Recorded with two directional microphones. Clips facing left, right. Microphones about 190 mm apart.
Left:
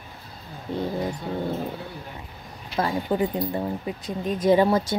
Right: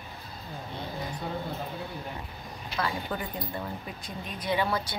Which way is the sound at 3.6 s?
40° left (ahead or behind).